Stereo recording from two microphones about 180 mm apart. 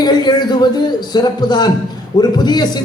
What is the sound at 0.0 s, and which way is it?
A man's voice, 25° left (ahead or behind).